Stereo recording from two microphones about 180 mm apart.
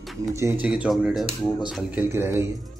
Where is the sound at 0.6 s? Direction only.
5° right (ahead or behind).